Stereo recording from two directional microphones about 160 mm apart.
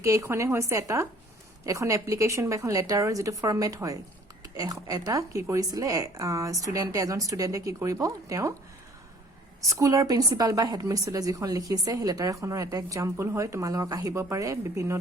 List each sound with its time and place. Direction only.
0.0 s speech: 20° right (ahead or behind)
9.6 s speech: 20° right (ahead or behind)